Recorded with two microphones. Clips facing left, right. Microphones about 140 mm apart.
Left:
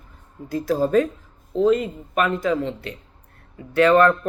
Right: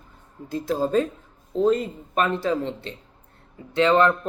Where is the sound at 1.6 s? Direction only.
35° right (ahead or behind).